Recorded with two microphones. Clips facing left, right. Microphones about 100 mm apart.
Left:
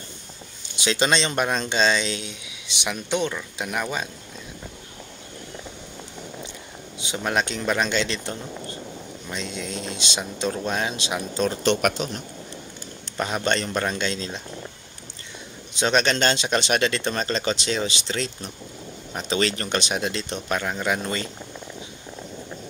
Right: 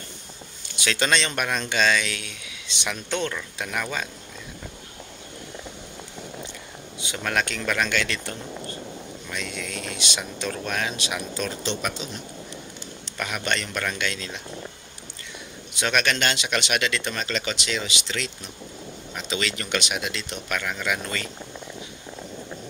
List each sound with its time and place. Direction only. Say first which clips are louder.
0.7 s speech: left 2 dB; 20° left (ahead or behind)
7.2 s speech: left 2 dB; 20° left (ahead or behind)
11.3 s speech: left 10 dB; 35° left (ahead or behind)
11.6 s speech: left 7 dB; 60° left (ahead or behind)
13.2 s speech: left 4 dB; 30° left (ahead or behind)
15.7 s speech: left 3 dB; 30° left (ahead or behind)